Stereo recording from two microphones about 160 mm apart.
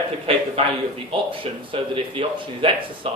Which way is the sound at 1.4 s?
35° right (ahead or behind).